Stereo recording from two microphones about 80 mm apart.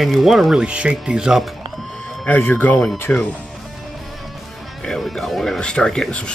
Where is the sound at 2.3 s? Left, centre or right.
Left.